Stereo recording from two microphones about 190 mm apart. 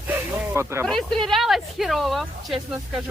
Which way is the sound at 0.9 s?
Centre (ahead or behind).